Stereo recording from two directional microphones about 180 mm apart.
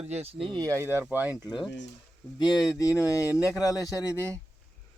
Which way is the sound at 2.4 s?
25° left (ahead or behind).